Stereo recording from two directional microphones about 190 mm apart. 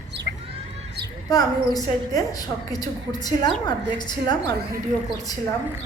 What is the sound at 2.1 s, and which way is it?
A woman's voice, 20° left (ahead or behind).